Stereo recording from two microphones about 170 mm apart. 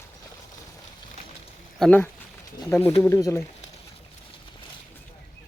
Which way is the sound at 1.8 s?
10° left (ahead or behind).